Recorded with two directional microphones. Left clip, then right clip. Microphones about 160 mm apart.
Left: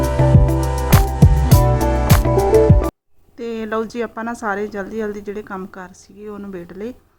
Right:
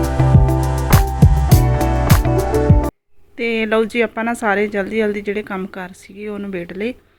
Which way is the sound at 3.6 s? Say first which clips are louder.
Right 6 dB; 20° right (ahead or behind).